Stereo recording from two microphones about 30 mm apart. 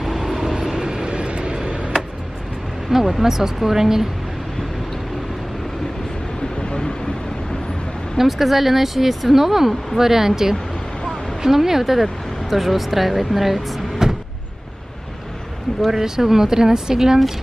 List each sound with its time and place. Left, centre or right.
0.0 s train: centre
0.6 s vehicle: centre
1.0 s a sound: right
2.9 s speech: centre
6.6 s vehicle: left
8.2 s speech: centre
14.0 s vehicle: centre
15.9 s speech: centre